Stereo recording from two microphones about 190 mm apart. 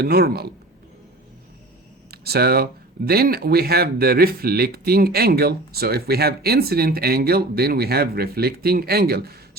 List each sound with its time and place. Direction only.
0.0 s speech: 55° right (ahead or behind)
2.0 s speech: 55° right (ahead or behind)